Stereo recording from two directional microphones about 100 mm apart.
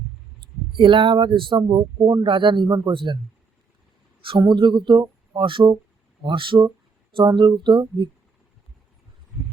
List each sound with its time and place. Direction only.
0.3 s a man's voice: 55° right (ahead or behind)
2.6 s a man's voice: 40° right (ahead or behind)
2.9 s a man's voice: 55° right (ahead or behind)
4.2 s a man's voice: 55° right (ahead or behind)